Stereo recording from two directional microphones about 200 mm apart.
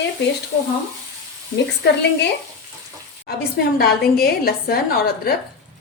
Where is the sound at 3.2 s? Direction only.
50° left (ahead or behind).